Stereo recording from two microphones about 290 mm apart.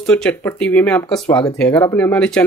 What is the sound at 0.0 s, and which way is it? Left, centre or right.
Speech, centre.